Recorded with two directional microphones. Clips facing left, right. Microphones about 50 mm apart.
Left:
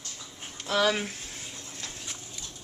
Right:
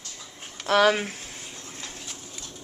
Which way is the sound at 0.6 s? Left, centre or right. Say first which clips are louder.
Right 6 dB; right.